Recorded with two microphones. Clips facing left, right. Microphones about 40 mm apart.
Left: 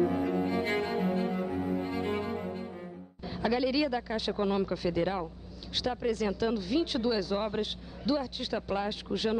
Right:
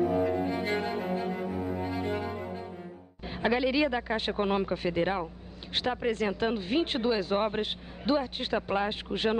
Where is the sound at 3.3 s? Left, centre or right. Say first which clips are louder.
Right 2 dB; right.